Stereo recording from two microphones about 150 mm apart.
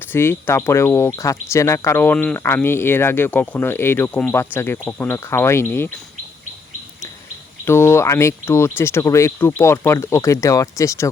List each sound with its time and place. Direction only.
0.1 s speech: 15° left (ahead or behind)
7.6 s speech: 15° left (ahead or behind)